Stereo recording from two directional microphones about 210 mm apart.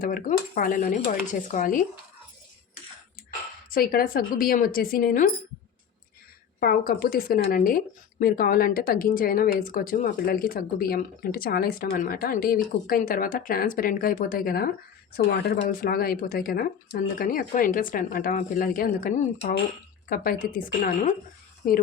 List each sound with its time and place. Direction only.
0.0 s speech: 40° left (ahead or behind)
3.7 s speech: 45° left (ahead or behind)
6.6 s speech: 45° left (ahead or behind)